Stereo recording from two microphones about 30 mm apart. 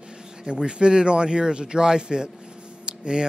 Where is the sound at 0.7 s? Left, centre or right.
Right.